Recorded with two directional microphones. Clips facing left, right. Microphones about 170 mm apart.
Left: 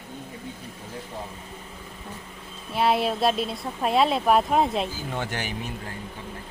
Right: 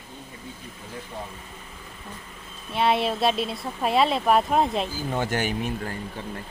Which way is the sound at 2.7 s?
Centre (ahead or behind).